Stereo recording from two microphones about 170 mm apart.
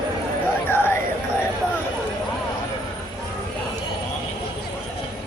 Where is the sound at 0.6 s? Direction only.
15° left (ahead or behind).